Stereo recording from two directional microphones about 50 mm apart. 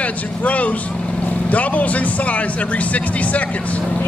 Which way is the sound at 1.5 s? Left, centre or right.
Left.